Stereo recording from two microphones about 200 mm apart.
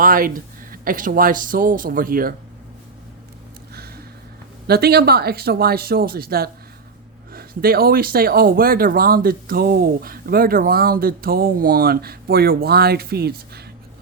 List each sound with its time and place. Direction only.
0.0 s speech: 45° right (ahead or behind)
4.6 s speech: 50° right (ahead or behind)